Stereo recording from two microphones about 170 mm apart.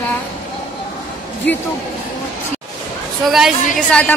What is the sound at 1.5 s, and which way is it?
Speech, 5° left (ahead or behind).